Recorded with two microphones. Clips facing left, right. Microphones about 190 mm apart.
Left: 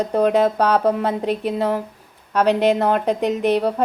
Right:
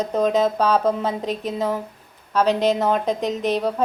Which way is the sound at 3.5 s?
10° left (ahead or behind).